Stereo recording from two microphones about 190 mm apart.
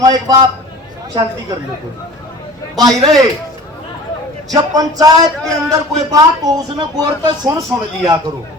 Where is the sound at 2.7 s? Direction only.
20° right (ahead or behind).